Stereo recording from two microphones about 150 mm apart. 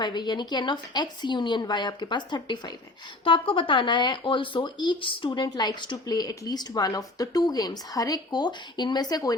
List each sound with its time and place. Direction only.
0.0 s speech: 30° left (ahead or behind)